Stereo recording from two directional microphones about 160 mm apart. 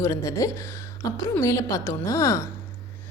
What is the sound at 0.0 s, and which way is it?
A woman's voice, 20° left (ahead or behind).